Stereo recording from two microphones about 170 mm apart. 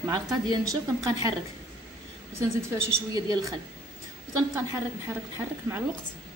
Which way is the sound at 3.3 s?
20° right (ahead or behind).